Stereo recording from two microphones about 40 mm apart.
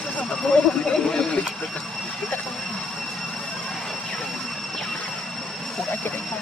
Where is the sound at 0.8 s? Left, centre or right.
Left.